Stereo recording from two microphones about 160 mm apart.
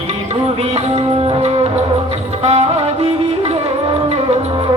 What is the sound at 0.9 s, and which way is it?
Music, 40° right (ahead or behind).